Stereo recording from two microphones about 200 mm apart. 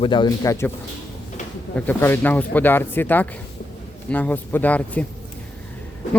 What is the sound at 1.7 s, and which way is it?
Speech, 10° left (ahead or behind).